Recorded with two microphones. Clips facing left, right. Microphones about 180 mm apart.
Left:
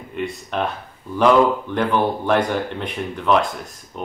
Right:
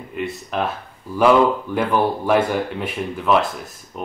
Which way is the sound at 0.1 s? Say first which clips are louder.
Even; centre (ahead or behind).